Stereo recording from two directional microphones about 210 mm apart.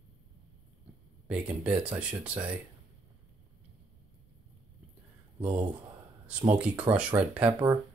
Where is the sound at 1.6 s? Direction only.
5° right (ahead or behind).